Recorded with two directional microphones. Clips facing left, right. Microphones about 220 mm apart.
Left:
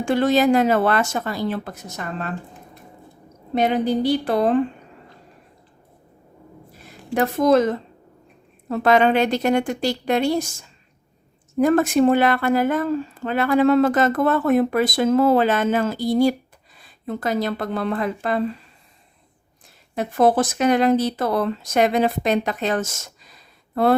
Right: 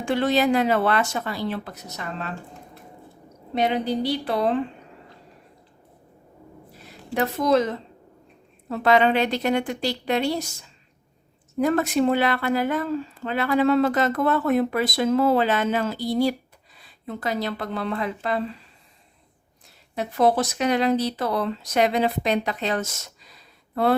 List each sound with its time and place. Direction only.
0.0 s speech: 45° left (ahead or behind)
3.5 s speech: 50° left (ahead or behind)
6.8 s speech: 50° left (ahead or behind)
20.0 s speech: 50° left (ahead or behind)